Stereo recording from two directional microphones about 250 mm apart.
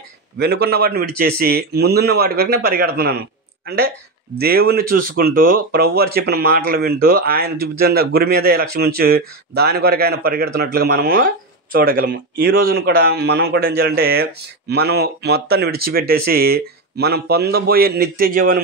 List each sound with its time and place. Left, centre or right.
0.4 s speech: right
4.4 s speech: right